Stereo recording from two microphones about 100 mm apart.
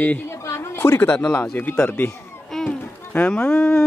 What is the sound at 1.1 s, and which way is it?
A man's voice, 15° left (ahead or behind).